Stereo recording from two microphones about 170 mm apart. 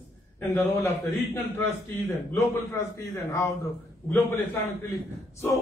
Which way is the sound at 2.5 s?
15° left (ahead or behind).